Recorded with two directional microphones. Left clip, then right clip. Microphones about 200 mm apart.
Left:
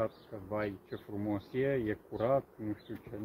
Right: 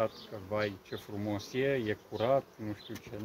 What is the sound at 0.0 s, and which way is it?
Speech, 15° right (ahead or behind).